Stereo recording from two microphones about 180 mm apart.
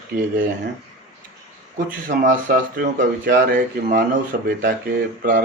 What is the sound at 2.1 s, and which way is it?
Speech, 50° right (ahead or behind).